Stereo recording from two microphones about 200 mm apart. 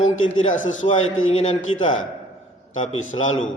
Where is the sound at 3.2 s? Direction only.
35° left (ahead or behind).